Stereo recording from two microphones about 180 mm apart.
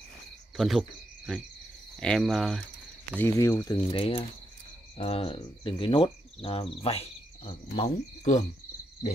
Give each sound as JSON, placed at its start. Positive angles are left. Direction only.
{"t": 0.6, "sound": "cricket", "side_deg": 0}
{"t": 3.2, "sound": "speech", "side_deg": 15}
{"t": 3.9, "sound": "cricket", "side_deg": 30}
{"t": 4.9, "sound": "speech", "side_deg": 30}